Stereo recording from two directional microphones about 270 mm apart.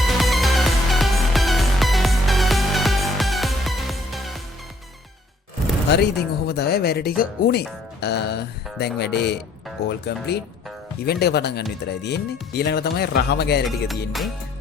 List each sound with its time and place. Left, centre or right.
0.0 s music: centre
5.9 s speech: left
11.0 s speech: left
13.7 s music: centre